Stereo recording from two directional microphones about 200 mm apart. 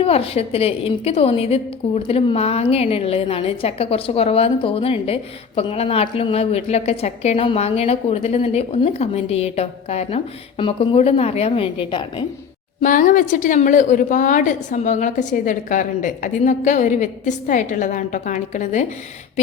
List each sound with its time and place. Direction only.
0.0 s a woman's voice: 30° left (ahead or behind)
12.8 s a woman's voice: 40° left (ahead or behind)